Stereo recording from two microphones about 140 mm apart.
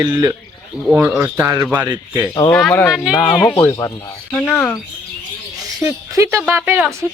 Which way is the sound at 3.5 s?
20° left (ahead or behind).